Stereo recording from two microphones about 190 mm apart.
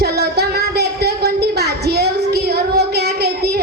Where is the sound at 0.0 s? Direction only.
55° right (ahead or behind).